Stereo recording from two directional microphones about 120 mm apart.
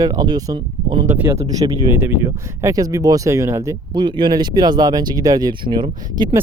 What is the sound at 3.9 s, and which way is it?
Speech, 40° right (ahead or behind).